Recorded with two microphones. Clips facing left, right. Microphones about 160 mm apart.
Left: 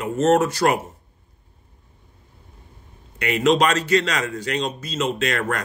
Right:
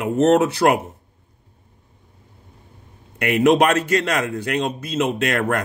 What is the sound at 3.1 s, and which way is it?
A man's voice, 55° right (ahead or behind).